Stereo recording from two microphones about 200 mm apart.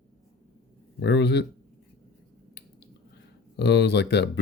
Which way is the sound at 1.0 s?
60° left (ahead or behind).